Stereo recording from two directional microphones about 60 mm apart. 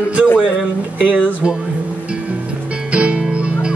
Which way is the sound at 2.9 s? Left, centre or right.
Centre.